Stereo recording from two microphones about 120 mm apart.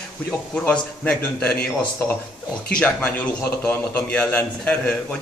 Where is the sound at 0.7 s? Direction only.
10° left (ahead or behind).